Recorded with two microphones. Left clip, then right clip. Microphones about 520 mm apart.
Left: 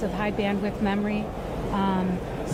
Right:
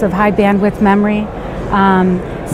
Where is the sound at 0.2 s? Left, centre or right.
Right.